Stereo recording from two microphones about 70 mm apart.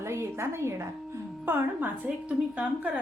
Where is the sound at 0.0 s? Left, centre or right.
Right.